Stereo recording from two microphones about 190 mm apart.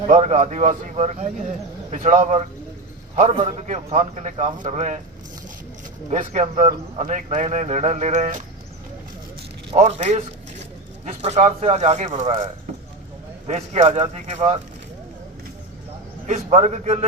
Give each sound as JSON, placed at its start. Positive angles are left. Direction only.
{"t": 0.1, "sound": "a man's voice", "side_deg": -35}
{"t": 6.1, "sound": "a man's voice", "side_deg": -35}
{"t": 9.7, "sound": "a man's voice", "side_deg": -35}
{"t": 13.5, "sound": "a man's voice", "side_deg": -35}
{"t": 16.2, "sound": "a man's voice", "side_deg": -35}